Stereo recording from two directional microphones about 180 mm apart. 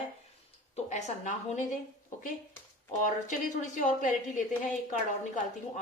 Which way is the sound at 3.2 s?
45° left (ahead or behind).